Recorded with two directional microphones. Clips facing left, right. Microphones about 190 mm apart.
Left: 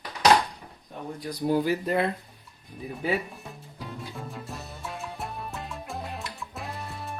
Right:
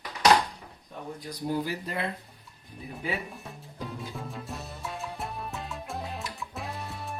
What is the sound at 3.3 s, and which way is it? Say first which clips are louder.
Music: even; centre (ahead or behind).